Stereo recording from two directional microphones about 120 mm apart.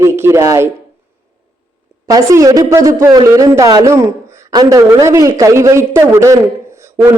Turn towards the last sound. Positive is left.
turn(degrees=-25)  # may be behind; listen again after turning